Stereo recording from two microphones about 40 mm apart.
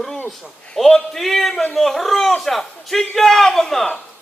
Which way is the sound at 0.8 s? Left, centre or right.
Centre.